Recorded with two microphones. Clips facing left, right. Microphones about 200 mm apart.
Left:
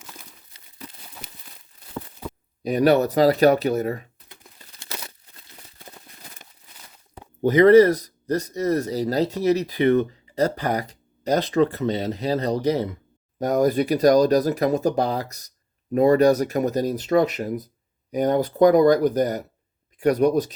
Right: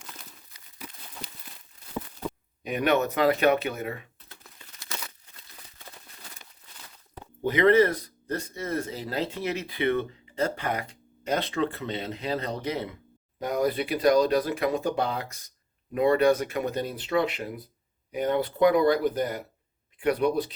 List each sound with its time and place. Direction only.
0.5 s a sound: 25° left (ahead or behind)
2.6 s speech: 35° left (ahead or behind)
4.5 s crumpling: 35° left (ahead or behind)
7.4 s speech: 40° left (ahead or behind)